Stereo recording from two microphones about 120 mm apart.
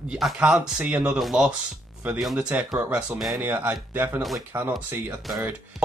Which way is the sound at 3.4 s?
15° right (ahead or behind).